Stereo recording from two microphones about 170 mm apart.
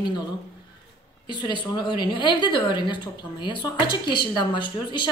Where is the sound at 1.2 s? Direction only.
25° left (ahead or behind).